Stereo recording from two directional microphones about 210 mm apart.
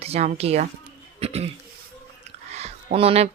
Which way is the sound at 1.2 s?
30° right (ahead or behind).